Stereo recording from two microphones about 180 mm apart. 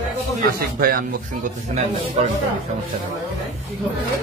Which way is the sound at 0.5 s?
55° right (ahead or behind).